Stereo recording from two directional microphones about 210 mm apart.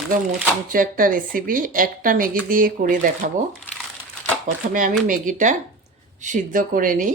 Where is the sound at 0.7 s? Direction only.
40° right (ahead or behind).